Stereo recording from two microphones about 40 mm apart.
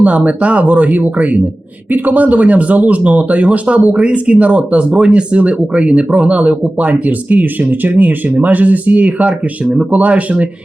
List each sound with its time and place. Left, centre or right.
0.0 s speech: right